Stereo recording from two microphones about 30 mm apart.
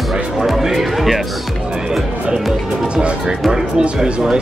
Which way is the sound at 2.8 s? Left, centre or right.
Right.